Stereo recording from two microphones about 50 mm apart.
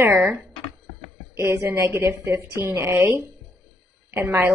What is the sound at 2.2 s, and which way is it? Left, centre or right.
Speech, right.